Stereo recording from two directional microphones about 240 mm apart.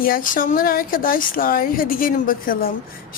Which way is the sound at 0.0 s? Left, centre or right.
Left.